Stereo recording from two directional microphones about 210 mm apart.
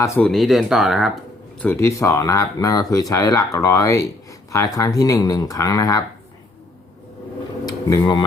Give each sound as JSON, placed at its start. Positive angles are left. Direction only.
{"t": 0.0, "sound": "speech", "side_deg": 5}
{"t": 1.6, "sound": "speech", "side_deg": 15}
{"t": 7.6, "sound": "a sound", "side_deg": 15}